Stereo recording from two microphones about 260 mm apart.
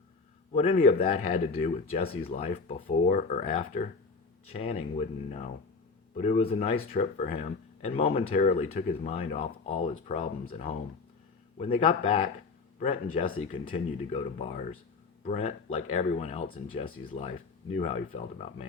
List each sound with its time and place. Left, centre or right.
0.5 s speech: left
13.5 s speech: left